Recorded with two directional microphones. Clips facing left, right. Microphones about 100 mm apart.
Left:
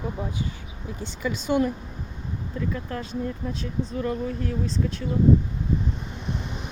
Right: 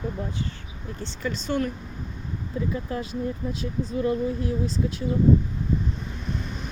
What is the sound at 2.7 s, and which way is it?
Speech, 10° right (ahead or behind).